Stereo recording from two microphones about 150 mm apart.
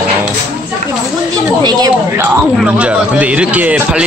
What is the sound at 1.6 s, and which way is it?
Speech, 25° right (ahead or behind).